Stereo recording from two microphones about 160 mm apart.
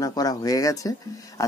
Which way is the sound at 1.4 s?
20° left (ahead or behind).